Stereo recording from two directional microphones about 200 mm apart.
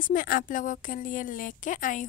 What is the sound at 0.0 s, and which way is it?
A woman's voice, 45° left (ahead or behind).